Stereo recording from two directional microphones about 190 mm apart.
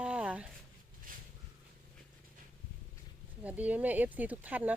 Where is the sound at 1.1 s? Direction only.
45° right (ahead or behind).